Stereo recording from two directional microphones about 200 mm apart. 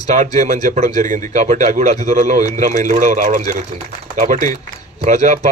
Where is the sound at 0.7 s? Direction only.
40° right (ahead or behind).